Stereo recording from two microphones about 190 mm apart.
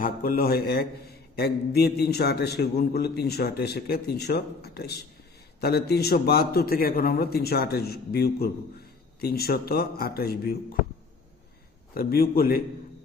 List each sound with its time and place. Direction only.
0.0 s a man's voice: 50° left (ahead or behind)
11.9 s a man's voice: 50° left (ahead or behind)